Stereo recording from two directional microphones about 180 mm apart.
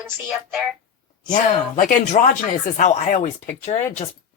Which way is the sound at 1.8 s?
45° left (ahead or behind).